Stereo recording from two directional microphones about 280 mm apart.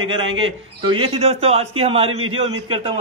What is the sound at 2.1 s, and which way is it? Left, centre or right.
Speech, right.